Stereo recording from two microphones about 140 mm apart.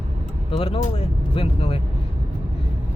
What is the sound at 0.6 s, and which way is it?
Speech, 40° left (ahead or behind).